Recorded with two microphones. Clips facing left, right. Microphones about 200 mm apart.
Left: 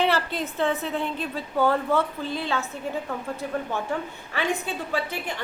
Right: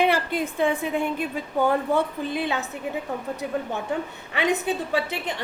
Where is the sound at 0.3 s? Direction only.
10° right (ahead or behind).